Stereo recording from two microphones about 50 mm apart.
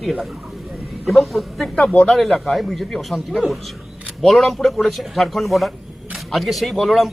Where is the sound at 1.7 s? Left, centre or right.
Left.